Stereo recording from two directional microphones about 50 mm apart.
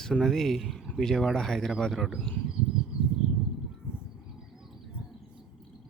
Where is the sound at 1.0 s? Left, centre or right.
Centre.